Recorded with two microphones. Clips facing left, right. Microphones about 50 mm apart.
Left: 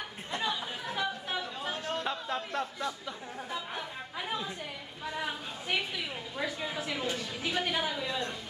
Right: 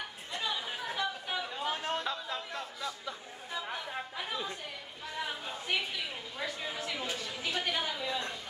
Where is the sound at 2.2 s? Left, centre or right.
Left.